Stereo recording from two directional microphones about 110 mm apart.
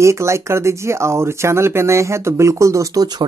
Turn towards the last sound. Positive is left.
turn(degrees=-30)  # may be behind; listen again after turning